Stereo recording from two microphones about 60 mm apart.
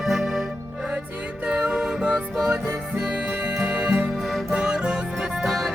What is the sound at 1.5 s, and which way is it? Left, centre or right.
Music, centre.